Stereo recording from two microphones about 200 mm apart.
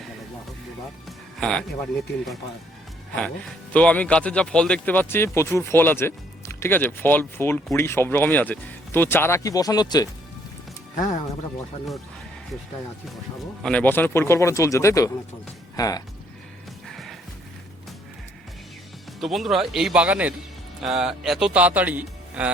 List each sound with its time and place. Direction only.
1.4 s speech: 5° left (ahead or behind)
3.2 s speech: 5° left (ahead or behind)
10.9 s speech: 40° left (ahead or behind)
13.6 s speech: 5° left (ahead or behind)
16.8 s music: centre (ahead or behind)
19.2 s speech: centre (ahead or behind)